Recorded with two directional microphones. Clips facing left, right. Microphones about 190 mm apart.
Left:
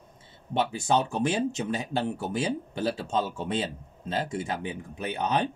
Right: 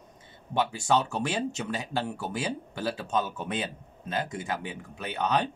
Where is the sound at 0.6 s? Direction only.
20° left (ahead or behind).